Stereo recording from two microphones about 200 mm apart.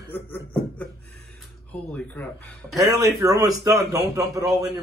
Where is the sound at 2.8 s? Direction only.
15° right (ahead or behind).